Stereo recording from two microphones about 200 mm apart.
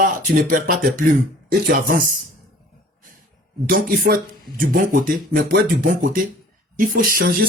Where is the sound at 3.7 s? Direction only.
45° right (ahead or behind).